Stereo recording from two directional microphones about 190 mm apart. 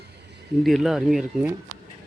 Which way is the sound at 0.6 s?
Centre (ahead or behind).